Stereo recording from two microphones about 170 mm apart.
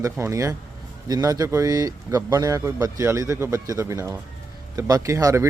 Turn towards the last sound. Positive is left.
turn(degrees=-20)  # may be behind; listen again after turning